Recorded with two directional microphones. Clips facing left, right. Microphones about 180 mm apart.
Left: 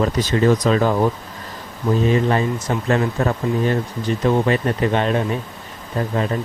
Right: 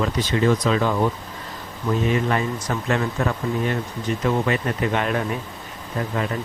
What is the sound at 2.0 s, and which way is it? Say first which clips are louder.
Speech: left 4 dB; 30° left (ahead or behind).